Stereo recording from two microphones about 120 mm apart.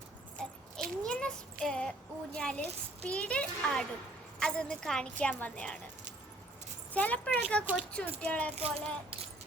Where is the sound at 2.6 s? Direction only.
65° right (ahead or behind).